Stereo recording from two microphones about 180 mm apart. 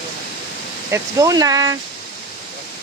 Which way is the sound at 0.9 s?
20° right (ahead or behind).